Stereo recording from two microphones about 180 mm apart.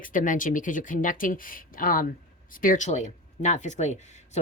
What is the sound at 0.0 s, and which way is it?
Speech, 45° left (ahead or behind).